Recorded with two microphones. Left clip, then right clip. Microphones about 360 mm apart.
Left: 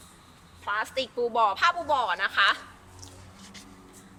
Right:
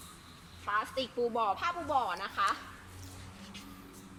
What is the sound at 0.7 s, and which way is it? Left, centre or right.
Speech, left.